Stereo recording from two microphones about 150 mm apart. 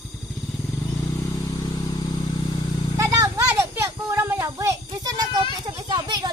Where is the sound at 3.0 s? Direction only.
20° right (ahead or behind).